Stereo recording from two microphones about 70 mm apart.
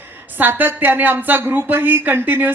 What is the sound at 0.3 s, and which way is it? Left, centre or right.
Speech, right.